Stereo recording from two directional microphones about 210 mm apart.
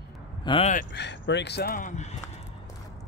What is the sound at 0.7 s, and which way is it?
Speech, 55° left (ahead or behind).